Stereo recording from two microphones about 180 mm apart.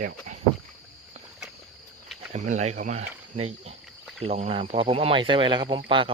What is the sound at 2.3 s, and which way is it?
Speech, 40° right (ahead or behind).